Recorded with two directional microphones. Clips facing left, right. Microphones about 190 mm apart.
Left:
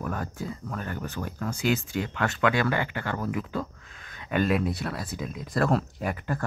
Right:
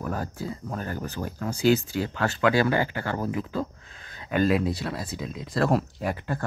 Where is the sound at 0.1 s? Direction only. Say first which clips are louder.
Right 2 dB; 35° right (ahead or behind).